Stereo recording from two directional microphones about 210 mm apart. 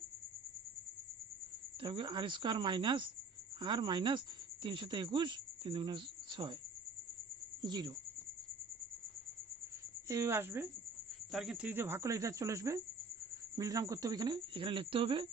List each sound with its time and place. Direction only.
1.8 s speech: 25° right (ahead or behind)
7.6 s speech: 20° right (ahead or behind)
10.1 s speech: 10° right (ahead or behind)